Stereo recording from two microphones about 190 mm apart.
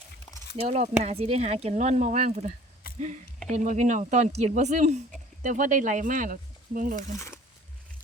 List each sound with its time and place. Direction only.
0.5 s speech: 35° right (ahead or behind)
2.8 s a sound: 50° left (ahead or behind)
3.5 s speech: 40° right (ahead or behind)